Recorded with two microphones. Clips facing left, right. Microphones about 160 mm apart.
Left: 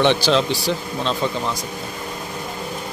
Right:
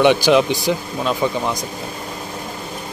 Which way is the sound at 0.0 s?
10° right (ahead or behind).